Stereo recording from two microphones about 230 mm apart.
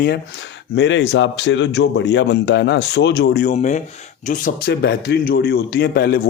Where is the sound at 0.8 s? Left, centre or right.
Left.